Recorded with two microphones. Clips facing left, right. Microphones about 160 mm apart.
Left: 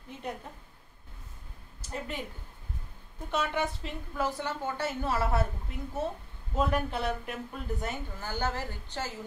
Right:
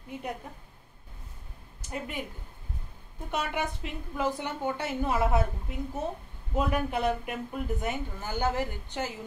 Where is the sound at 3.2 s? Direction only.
15° right (ahead or behind).